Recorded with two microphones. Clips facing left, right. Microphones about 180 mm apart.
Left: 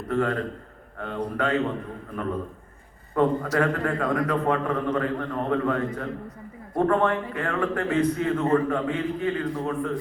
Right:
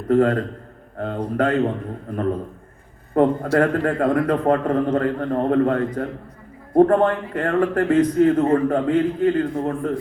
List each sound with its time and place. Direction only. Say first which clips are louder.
0.1 s a man's voice: right 8 dB; 40° right (ahead or behind)
3.2 s a man's voice: right 5 dB; 50° right (ahead or behind)